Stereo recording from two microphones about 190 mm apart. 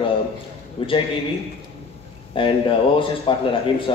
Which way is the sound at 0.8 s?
30° left (ahead or behind).